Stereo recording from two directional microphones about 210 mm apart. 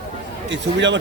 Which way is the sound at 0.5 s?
60° right (ahead or behind).